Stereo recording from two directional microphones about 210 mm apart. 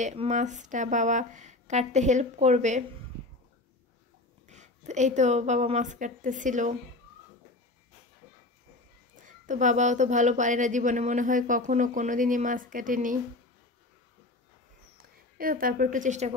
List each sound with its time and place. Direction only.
0.0 s a woman's voice: 35° right (ahead or behind)
4.5 s a woman's voice: 35° right (ahead or behind)
9.1 s a woman's voice: 35° right (ahead or behind)
15.0 s speech: 40° right (ahead or behind)